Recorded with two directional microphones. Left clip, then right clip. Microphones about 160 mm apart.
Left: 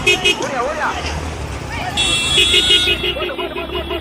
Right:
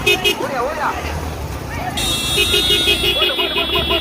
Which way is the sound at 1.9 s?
30° right (ahead or behind).